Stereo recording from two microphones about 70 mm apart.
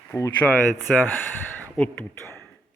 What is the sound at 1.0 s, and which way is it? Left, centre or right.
Speech, left.